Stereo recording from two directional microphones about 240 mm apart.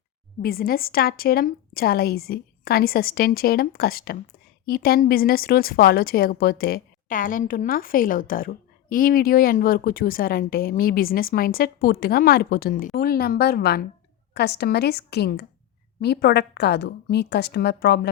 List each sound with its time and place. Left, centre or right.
0.4 s a woman's voice: left